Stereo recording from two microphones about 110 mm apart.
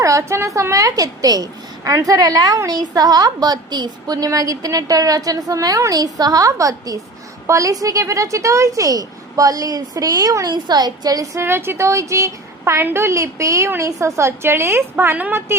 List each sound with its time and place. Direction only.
0.0 s a woman's voice: 30° right (ahead or behind)